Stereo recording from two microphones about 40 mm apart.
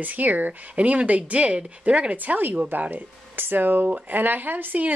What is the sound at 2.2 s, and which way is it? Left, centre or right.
Speech, right.